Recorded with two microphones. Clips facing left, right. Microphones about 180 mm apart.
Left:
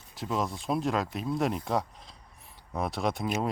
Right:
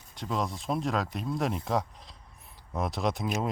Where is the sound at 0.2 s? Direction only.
Centre (ahead or behind).